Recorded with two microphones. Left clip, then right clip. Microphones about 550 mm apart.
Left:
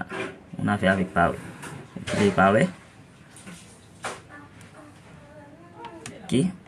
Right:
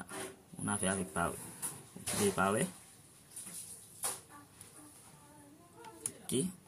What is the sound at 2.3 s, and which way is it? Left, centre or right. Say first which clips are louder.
Speech: left 15 dB; right.